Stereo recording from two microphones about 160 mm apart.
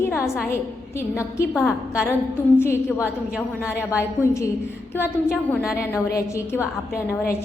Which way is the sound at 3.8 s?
15° left (ahead or behind).